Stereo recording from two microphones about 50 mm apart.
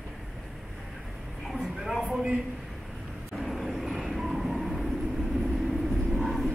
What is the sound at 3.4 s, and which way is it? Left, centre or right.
Vehicle, centre.